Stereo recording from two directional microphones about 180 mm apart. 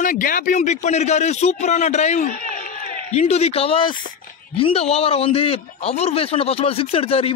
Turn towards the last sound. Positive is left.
turn(degrees=30)  # may be behind; listen again after turning